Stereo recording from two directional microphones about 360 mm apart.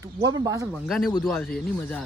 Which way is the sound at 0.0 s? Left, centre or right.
Centre.